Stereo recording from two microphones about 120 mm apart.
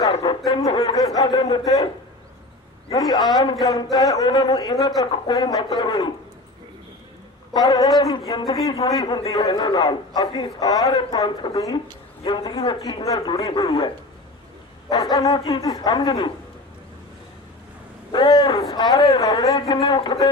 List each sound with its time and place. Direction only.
0.0 s a sound: 40° left (ahead or behind)
0.5 s speech: 30° left (ahead or behind)
2.9 s speech: 30° left (ahead or behind)
7.5 s speech: 30° left (ahead or behind)
18.1 s speech: 40° left (ahead or behind)